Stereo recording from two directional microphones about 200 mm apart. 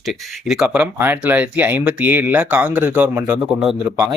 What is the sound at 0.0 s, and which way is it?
Speech, centre (ahead or behind).